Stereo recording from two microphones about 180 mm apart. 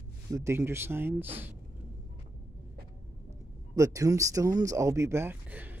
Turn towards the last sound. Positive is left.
turn(degrees=-10)  # may be behind; listen again after turning